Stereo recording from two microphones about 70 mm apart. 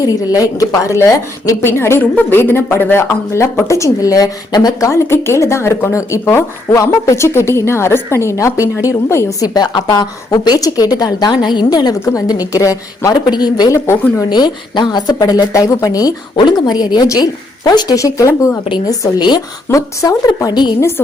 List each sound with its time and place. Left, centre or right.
0.3 s speech: left
4.9 s speech: left
9.4 s a woman's voice: left
12.3 s speech: left
13.1 s a woman's voice: left
13.7 s speech: left
14.2 s a woman's voice: left
17.9 s speech: left
18.9 s a woman's voice: left
19.7 s speech: left